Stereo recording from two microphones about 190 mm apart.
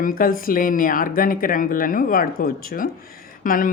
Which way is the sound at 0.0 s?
50° left (ahead or behind).